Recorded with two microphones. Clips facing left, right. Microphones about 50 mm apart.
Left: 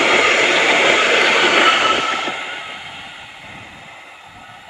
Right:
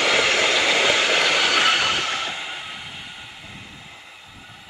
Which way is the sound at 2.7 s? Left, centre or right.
Centre.